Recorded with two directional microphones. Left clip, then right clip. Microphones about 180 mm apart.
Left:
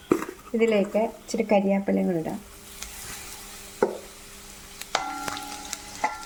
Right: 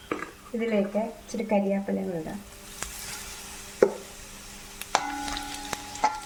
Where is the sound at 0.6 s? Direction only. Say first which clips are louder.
Left 5 dB; 55° left (ahead or behind).